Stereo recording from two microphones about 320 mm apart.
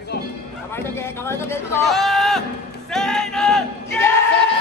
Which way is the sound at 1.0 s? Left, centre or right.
Centre.